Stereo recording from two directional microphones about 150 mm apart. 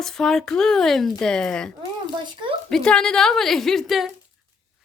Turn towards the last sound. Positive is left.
turn(degrees=0)  # may be behind; listen again after turning